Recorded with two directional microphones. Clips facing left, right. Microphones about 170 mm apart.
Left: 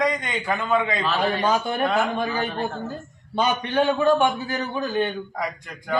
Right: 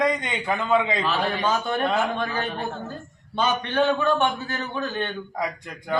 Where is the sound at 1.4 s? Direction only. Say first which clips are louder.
Left 2 dB; 10° left (ahead or behind).